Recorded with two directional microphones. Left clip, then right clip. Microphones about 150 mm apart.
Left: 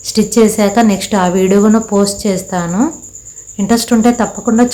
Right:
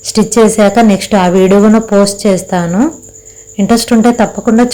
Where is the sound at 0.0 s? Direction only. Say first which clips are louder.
Right 3 dB; 20° right (ahead or behind).